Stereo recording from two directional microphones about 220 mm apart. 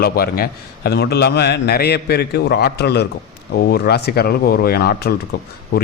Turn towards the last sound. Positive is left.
turn(degrees=45)  # may be behind; listen again after turning